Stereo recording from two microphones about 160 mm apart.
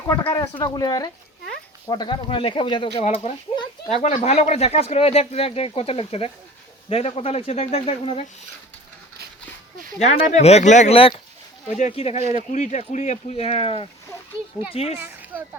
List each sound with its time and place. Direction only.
0.1 s speech: 20° left (ahead or behind)
10.0 s speech: 45° left (ahead or behind)
14.9 s speech: 10° right (ahead or behind)